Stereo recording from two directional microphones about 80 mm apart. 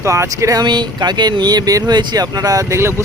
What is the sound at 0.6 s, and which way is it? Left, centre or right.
Speech, right.